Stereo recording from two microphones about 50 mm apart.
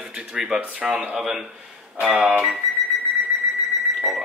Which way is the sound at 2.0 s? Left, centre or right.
Centre.